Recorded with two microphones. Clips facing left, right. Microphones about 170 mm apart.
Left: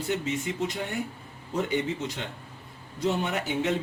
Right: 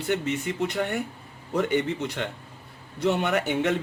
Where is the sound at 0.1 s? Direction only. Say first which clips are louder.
Right 3 dB; 60° right (ahead or behind).